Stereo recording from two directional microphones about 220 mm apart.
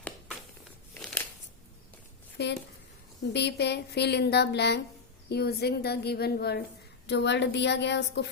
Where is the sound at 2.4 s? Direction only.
50° left (ahead or behind).